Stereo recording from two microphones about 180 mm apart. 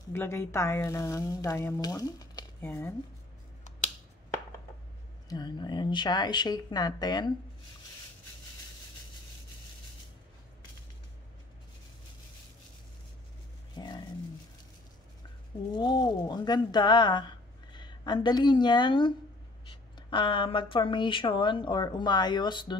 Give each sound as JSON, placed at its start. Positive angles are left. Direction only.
{"t": 0.1, "sound": "speech", "side_deg": 15}
{"t": 5.3, "sound": "speech", "side_deg": 25}
{"t": 13.7, "sound": "a sound", "side_deg": 25}
{"t": 15.7, "sound": "a woman's voice", "side_deg": 25}